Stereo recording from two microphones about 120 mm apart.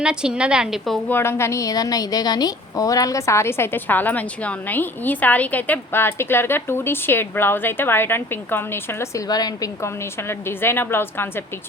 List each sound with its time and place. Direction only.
0.0 s a woman's voice: 5° right (ahead or behind)
1.0 s a woman's voice: 20° left (ahead or behind)